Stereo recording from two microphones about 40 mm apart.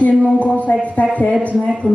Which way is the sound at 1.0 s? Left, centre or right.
Left.